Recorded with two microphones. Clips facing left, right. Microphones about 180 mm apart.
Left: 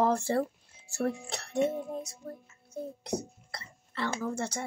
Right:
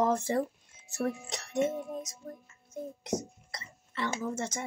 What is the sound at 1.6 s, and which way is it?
Music, 15° left (ahead or behind).